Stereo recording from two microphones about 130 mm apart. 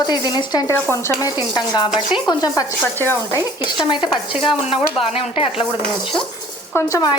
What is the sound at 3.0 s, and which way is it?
Speech, 15° left (ahead or behind).